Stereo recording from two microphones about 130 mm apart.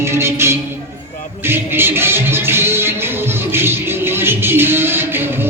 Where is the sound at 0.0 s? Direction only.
20° right (ahead or behind).